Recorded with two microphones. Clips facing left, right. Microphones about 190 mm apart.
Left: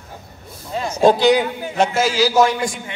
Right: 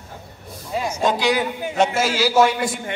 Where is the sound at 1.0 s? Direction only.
30° left (ahead or behind).